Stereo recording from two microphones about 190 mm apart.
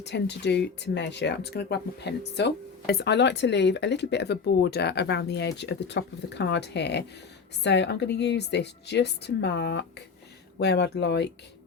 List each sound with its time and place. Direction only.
0.0 s speech: 65° left (ahead or behind)